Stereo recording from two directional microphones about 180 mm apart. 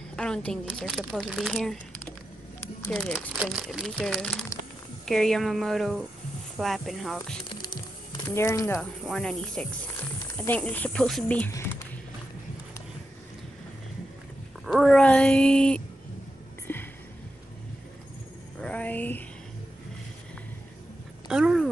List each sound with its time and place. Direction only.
0.1 s speech: 5° left (ahead or behind)
3.3 s speech: centre (ahead or behind)
7.4 s crumpling: 25° left (ahead or behind)
8.7 s speech: centre (ahead or behind)
14.7 s speech: centre (ahead or behind)
16.7 s a sound: 10° left (ahead or behind)
18.6 s speech: 5° left (ahead or behind)
21.3 s a sound: 5° right (ahead or behind)